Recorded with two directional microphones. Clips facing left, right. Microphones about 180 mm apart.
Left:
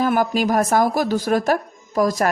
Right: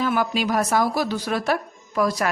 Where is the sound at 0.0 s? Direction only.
45° left (ahead or behind).